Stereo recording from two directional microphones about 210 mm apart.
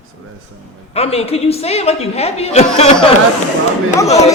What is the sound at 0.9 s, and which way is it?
A woman's voice, 30° left (ahead or behind).